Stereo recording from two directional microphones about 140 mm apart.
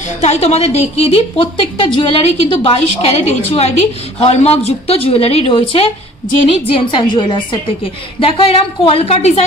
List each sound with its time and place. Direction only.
0.2 s a woman's voice: 50° left (ahead or behind)